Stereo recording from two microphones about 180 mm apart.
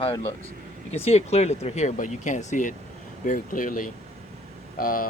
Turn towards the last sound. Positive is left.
turn(degrees=50)  # may be behind; listen again after turning